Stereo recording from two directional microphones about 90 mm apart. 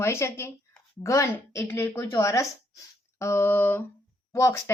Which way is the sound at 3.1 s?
30° left (ahead or behind).